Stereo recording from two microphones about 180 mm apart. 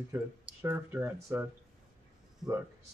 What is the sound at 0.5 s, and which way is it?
Speech, 15° right (ahead or behind).